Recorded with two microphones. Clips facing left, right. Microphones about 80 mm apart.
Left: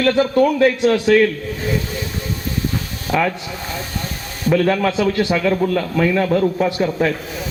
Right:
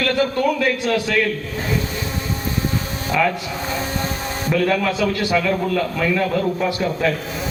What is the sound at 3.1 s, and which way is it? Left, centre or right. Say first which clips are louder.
Speech: left 1 dB; centre.